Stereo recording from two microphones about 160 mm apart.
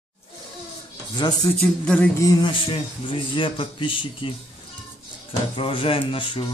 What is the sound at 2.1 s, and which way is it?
A man's voice, 25° left (ahead or behind).